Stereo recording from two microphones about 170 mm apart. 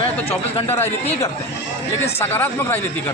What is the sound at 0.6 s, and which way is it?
Speech, 15° left (ahead or behind).